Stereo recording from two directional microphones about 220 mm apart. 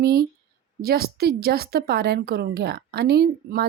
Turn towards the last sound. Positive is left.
turn(degrees=-45)  # may be behind; listen again after turning